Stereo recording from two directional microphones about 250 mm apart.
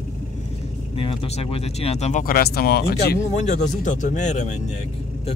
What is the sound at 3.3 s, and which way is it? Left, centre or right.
Speech, left.